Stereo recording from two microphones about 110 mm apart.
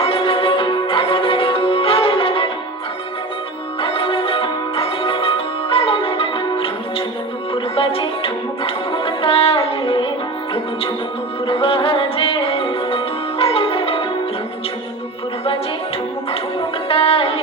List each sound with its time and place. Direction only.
0.0 s music: 60° left (ahead or behind)
3.8 s music: 55° left (ahead or behind)
16.9 s music: 60° left (ahead or behind)